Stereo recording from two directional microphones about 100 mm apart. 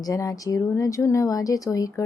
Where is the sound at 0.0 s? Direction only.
35° left (ahead or behind).